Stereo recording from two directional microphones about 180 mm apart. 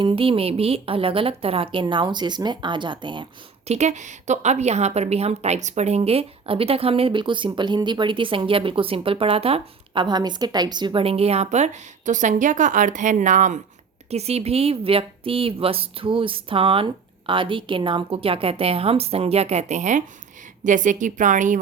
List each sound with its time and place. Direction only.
0.0 s a woman's voice: 30° right (ahead or behind)
3.7 s a woman's voice: 40° right (ahead or behind)